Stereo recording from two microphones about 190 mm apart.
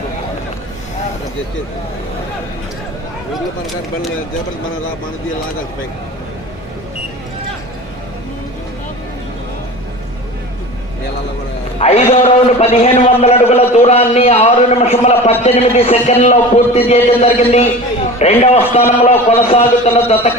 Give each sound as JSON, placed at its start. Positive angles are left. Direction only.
{"t": 11.8, "sound": "a man's voice", "side_deg": 30}